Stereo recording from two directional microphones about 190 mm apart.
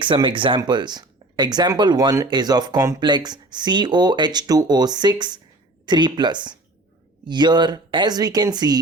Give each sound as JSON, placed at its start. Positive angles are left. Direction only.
{"t": 0.0, "sound": "speech", "side_deg": -25}